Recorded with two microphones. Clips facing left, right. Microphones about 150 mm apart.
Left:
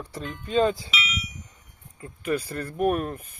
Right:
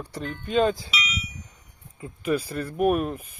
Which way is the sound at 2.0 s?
10° right (ahead or behind).